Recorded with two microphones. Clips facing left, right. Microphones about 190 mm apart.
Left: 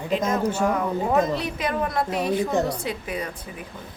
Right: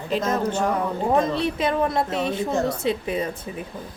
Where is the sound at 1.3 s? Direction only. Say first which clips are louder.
Right 4 dB; 25° right (ahead or behind).